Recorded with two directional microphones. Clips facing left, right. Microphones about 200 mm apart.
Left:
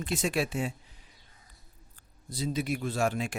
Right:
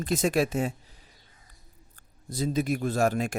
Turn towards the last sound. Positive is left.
turn(degrees=-45)  # may be behind; listen again after turning